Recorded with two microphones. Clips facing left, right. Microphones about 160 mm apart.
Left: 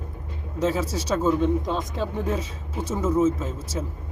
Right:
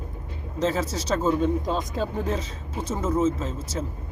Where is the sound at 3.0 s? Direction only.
15° left (ahead or behind).